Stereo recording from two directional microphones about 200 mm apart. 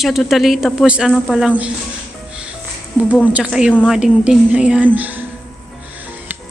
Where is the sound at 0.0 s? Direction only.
Centre (ahead or behind).